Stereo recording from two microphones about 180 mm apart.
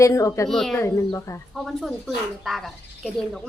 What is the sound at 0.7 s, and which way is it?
Speech, 15° left (ahead or behind).